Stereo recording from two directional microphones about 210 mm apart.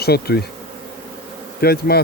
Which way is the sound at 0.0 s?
50° left (ahead or behind).